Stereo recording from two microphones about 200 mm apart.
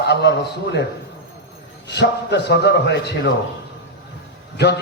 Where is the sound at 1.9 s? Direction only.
55° left (ahead or behind).